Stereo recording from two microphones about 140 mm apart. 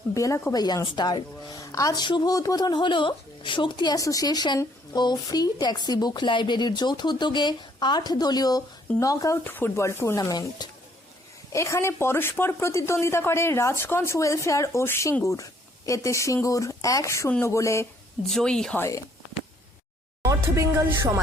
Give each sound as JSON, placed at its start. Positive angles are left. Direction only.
{"t": 0.1, "sound": "a woman's voice", "side_deg": 25}
{"t": 18.3, "sound": "speech", "side_deg": 5}
{"t": 18.8, "sound": "a woman's voice", "side_deg": 20}
{"t": 20.2, "sound": "speech", "side_deg": -25}